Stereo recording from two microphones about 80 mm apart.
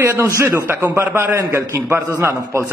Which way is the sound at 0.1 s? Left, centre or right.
Right.